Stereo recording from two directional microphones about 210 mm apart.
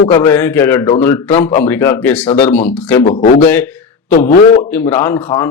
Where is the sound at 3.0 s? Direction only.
40° left (ahead or behind).